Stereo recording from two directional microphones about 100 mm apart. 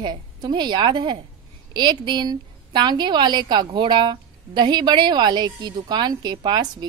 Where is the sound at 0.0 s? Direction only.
45° right (ahead or behind).